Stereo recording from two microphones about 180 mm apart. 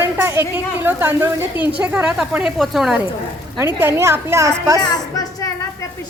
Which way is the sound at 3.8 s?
15° right (ahead or behind).